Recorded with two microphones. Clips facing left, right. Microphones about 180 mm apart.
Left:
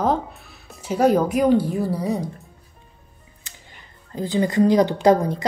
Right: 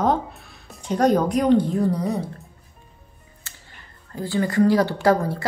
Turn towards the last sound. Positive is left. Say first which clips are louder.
# left 3 dB
turn(degrees=20)  # may be behind; listen again after turning